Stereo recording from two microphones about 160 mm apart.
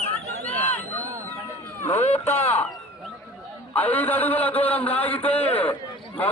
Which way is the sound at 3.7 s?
10° left (ahead or behind).